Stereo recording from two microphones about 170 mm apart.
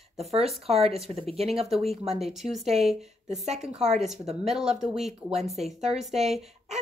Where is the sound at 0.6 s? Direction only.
35° right (ahead or behind).